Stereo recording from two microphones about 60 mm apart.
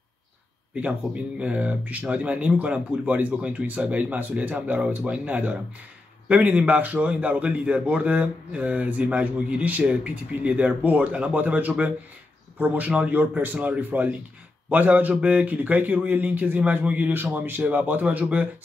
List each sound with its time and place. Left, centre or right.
0.7 s a man's voice: right